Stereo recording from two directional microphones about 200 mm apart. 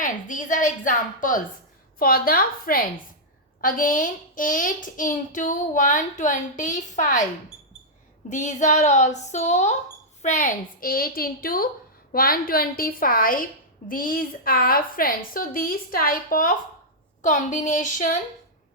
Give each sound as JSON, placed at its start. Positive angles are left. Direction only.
{"t": 0.0, "sound": "a child's voice", "side_deg": 40}
{"t": 8.3, "sound": "a child's voice", "side_deg": 35}